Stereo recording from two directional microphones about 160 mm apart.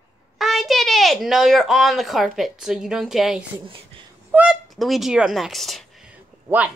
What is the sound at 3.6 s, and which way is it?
Speech, 35° right (ahead or behind).